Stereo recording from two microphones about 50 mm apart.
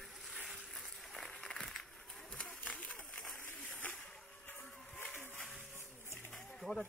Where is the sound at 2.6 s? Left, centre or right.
Left.